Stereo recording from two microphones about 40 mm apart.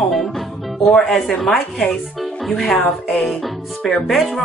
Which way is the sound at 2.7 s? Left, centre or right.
Left.